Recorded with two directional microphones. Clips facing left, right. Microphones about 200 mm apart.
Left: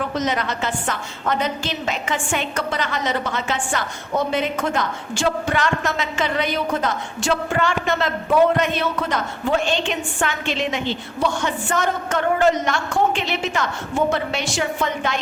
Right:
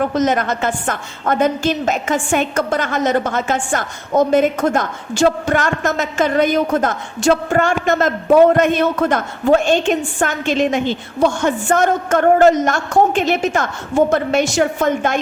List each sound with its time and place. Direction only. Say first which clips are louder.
0.0 s a woman's voice: right 6 dB; 45° right (ahead or behind)